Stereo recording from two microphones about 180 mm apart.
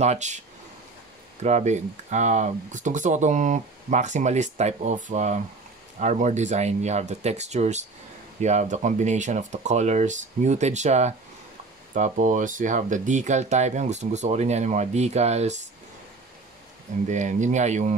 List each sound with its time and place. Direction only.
0.0 s speech: 40° right (ahead or behind)
1.4 s speech: 40° right (ahead or behind)
17.1 s speech: 40° right (ahead or behind)